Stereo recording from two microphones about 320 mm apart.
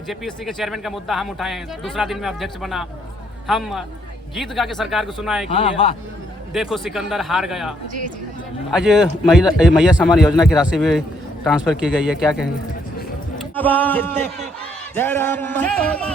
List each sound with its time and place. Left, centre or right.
0.1 s speech: centre
5.5 s music: centre
6.5 s speech: centre
8.7 s speech: centre
13.6 s speech: centre
14.9 s music: centre